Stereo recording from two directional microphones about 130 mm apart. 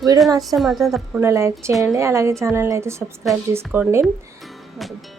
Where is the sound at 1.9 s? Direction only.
20° right (ahead or behind).